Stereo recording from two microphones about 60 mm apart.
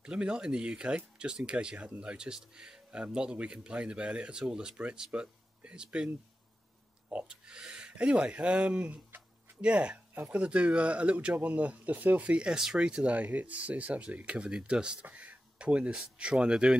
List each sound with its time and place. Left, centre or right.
0.0 s speech: centre
7.1 s speech: centre
15.0 s a sound: right
16.2 s speech: centre